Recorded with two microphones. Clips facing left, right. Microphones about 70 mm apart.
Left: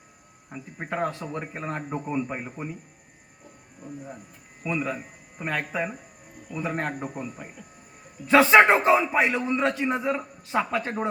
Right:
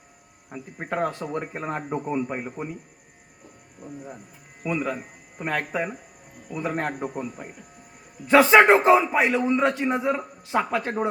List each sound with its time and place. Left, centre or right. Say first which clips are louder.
0.5 s speech: right 2 dB; centre
4.6 s speech: right 2 dB; centre
4.9 s a sound: right 2 dB; centre
6.5 s a man's voice: right 2 dB; centre